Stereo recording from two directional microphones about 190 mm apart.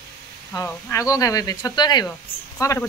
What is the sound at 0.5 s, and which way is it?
Speech, 15° left (ahead or behind).